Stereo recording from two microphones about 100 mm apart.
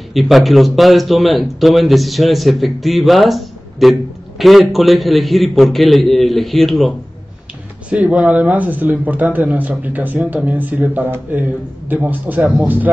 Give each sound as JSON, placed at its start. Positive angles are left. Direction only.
{"t": 0.1, "sound": "speech", "side_deg": 0}
{"t": 7.9, "sound": "speech", "side_deg": -15}